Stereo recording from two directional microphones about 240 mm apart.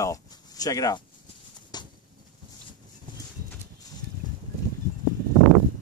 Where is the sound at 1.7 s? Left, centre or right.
Centre.